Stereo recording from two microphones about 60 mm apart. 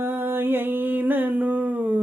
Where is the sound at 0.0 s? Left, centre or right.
Right.